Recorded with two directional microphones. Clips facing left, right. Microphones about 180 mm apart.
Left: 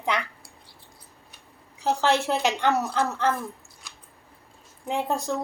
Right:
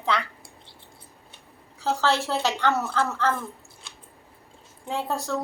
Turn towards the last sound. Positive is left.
turn(degrees=15)  # may be behind; listen again after turning